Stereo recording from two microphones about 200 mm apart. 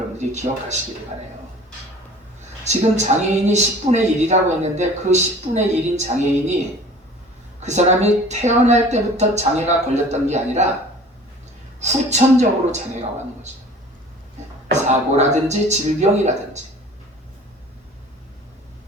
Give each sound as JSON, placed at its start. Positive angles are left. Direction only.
{"t": 0.2, "sound": "speech", "side_deg": -35}
{"t": 2.6, "sound": "speech", "side_deg": -35}
{"t": 7.6, "sound": "speech", "side_deg": -35}
{"t": 11.8, "sound": "speech", "side_deg": -35}
{"t": 14.7, "sound": "speech", "side_deg": -35}